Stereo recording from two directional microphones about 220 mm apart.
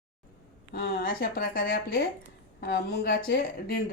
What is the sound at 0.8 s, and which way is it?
Speech, 45° left (ahead or behind).